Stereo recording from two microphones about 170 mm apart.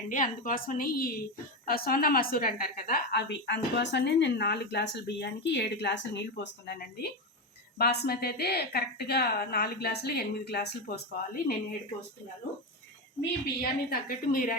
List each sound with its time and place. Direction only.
0.1 s a woman's voice: 50° left (ahead or behind)
13.6 s a woman's voice: 60° left (ahead or behind)